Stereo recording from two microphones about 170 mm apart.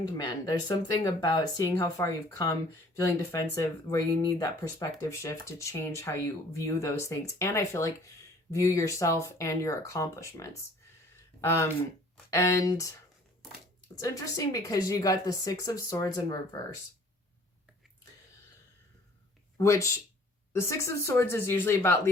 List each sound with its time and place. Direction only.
0.2 s speech: 25° left (ahead or behind)
13.9 s speech: 20° left (ahead or behind)
19.5 s speech: 20° left (ahead or behind)